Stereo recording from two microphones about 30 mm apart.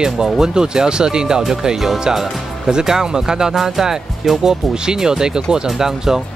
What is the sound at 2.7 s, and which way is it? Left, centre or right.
Speech, right.